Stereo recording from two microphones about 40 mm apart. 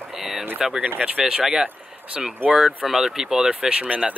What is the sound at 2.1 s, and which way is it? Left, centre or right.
Speech, right.